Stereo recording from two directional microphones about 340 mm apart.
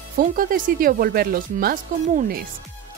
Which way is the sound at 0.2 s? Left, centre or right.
Right.